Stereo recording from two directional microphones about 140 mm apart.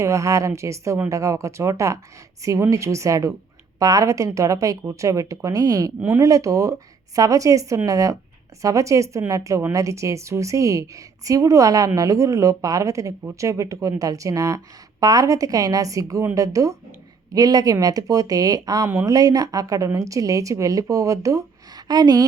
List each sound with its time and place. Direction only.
0.0 s a woman's voice: 20° right (ahead or behind)